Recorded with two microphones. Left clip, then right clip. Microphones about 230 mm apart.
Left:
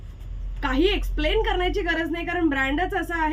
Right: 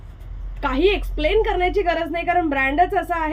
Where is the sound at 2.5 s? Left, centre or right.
Centre.